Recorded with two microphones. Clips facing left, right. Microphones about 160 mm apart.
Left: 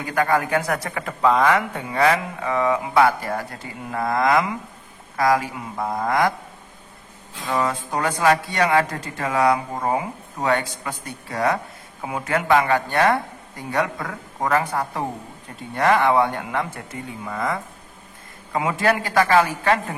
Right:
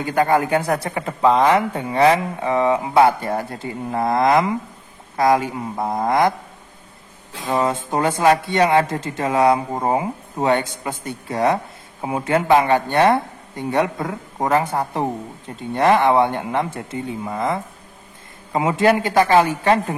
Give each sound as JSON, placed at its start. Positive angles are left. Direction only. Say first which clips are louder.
{"t": 0.0, "sound": "speech", "louder": "right 3 dB", "side_deg": -25}
{"t": 7.3, "sound": "speech", "louder": "right 3 dB", "side_deg": -25}